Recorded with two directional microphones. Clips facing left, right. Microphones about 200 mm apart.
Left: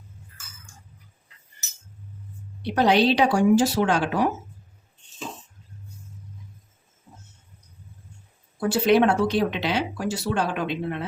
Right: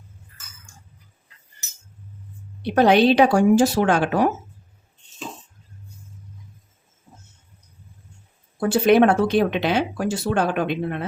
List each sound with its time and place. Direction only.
2.7 s speech: 55° right (ahead or behind)
8.7 s speech: 55° right (ahead or behind)